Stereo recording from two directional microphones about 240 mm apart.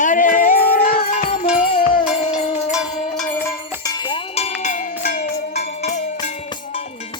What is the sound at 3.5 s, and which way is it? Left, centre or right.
Music, centre.